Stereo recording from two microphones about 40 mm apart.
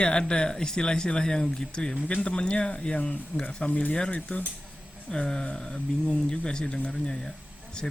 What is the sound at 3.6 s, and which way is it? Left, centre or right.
Speech, left.